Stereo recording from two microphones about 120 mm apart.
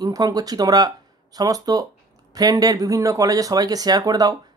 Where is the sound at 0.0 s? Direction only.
30° right (ahead or behind).